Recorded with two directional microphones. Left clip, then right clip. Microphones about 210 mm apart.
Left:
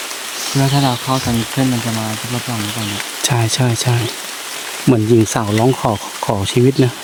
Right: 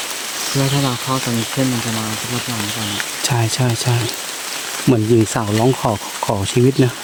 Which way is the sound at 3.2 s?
10° left (ahead or behind).